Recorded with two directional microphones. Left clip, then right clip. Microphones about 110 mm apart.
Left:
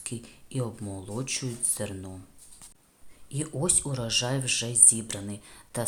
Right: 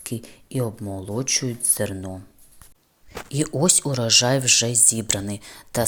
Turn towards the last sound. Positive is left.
turn(degrees=-50)  # may be behind; listen again after turning